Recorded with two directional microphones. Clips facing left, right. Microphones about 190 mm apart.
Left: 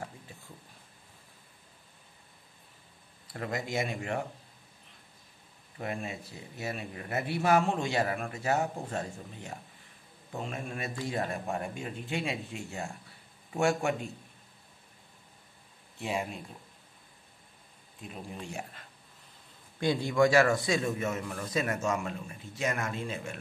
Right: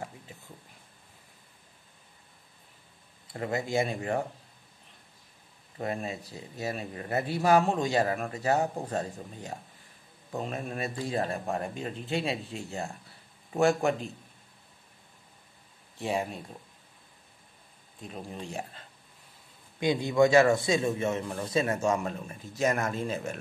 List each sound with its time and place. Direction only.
3.3 s a man's voice: 25° right (ahead or behind)
5.8 s a man's voice: 35° right (ahead or behind)
16.0 s a man's voice: 35° right (ahead or behind)
18.0 s a man's voice: 35° right (ahead or behind)
19.8 s a man's voice: 20° right (ahead or behind); by 23.4 s 40° right (ahead or behind)